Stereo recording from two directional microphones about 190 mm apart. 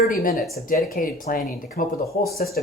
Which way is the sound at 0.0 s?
50° left (ahead or behind).